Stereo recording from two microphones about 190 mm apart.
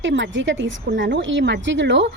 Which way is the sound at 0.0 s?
75° right (ahead or behind).